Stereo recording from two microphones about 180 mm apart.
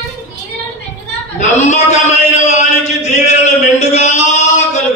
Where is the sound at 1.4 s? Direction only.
40° left (ahead or behind).